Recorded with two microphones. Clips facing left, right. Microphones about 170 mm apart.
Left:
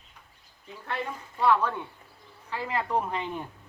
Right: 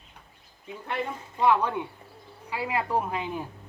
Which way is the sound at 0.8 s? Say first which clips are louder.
Right 2 dB; 15° right (ahead or behind).